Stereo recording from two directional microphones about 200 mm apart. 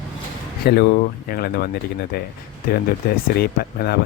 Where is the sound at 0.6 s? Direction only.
55° left (ahead or behind).